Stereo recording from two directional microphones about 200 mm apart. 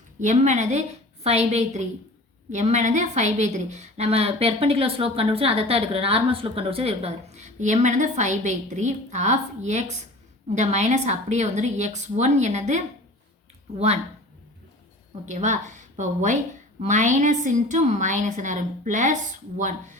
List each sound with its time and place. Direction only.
0.2 s a woman's voice: 35° right (ahead or behind)
15.3 s a woman's voice: 35° right (ahead or behind)